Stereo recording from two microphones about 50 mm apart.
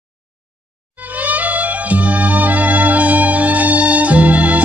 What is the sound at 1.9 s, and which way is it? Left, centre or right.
Music, right.